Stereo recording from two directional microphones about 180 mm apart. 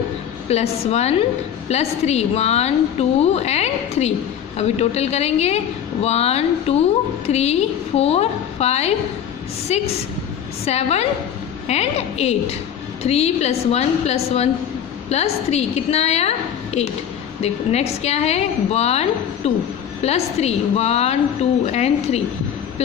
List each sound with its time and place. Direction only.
0.5 s a woman's voice: 35° left (ahead or behind)